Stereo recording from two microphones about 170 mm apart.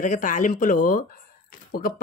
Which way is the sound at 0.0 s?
50° left (ahead or behind).